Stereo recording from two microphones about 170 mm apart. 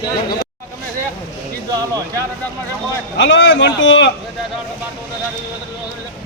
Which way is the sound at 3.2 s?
90° left.